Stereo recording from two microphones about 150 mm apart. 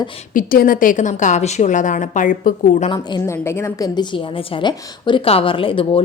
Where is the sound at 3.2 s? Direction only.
15° left (ahead or behind).